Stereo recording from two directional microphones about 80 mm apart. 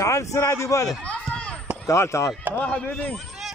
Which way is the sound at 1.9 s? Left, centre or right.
Left.